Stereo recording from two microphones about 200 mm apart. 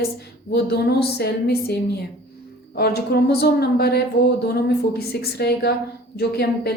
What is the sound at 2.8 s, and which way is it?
A woman's voice, 50° left (ahead or behind).